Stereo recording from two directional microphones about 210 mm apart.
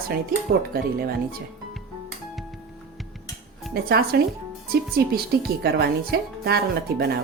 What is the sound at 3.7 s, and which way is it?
Speech, 45° right (ahead or behind).